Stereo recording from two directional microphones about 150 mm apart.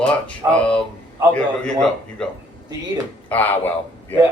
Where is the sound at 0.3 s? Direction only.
10° left (ahead or behind).